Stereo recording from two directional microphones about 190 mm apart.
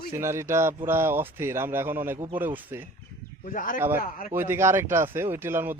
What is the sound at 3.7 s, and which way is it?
Speech, 10° right (ahead or behind).